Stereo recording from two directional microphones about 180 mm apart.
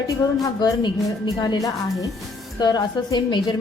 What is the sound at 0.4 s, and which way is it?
A woman's voice, 25° left (ahead or behind).